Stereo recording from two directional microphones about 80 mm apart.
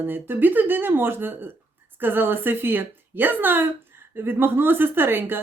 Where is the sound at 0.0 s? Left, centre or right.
Right.